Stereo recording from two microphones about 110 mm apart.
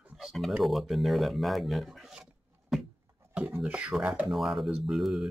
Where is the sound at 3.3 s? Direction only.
15° right (ahead or behind).